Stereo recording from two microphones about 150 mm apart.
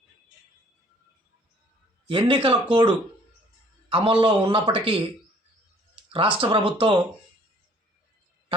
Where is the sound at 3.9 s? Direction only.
35° right (ahead or behind).